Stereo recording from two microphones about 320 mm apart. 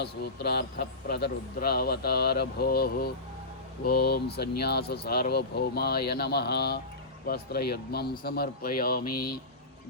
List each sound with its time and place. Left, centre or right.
0.0 s speech: left